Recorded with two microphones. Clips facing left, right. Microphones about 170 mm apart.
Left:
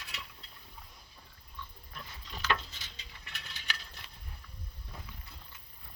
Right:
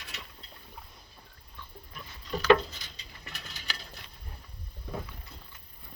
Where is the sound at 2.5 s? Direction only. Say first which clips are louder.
Right 10 dB; 40° right (ahead or behind).